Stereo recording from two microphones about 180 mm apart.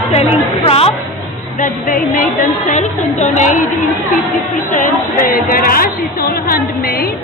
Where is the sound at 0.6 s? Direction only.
35° left (ahead or behind).